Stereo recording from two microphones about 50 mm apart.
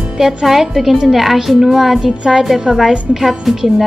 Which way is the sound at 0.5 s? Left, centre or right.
Centre.